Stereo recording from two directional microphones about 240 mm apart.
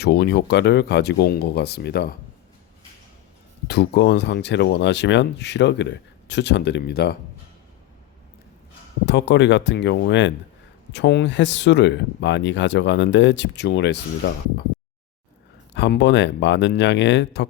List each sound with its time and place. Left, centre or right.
0.0 s speech: left
3.7 s speech: left
9.0 s speech: left
15.7 s speech: left